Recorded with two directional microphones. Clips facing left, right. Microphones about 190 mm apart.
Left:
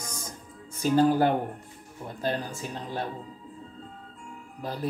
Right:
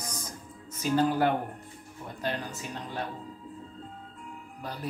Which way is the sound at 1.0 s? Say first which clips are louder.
Left 4 dB; 35° left (ahead or behind).